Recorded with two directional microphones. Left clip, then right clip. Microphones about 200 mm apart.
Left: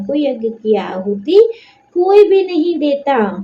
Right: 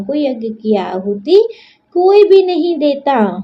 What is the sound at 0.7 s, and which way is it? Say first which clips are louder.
A woman's voice: right 2 dB; 45° right (ahead or behind).